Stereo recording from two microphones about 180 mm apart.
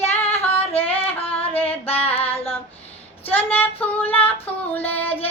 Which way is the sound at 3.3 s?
10° left (ahead or behind).